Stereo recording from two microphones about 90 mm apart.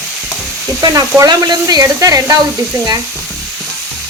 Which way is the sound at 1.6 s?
40° right (ahead or behind).